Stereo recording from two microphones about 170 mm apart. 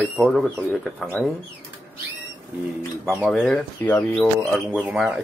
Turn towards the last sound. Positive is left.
turn(degrees=-5)  # may be behind; listen again after turning